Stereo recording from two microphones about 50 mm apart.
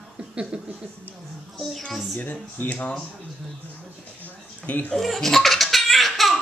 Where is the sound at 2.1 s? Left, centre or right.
Left.